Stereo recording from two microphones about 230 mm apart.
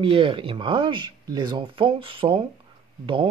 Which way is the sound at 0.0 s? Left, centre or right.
Right.